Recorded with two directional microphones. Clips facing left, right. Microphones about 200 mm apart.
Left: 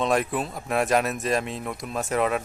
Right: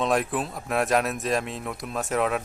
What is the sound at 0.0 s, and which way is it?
Speech, centre (ahead or behind).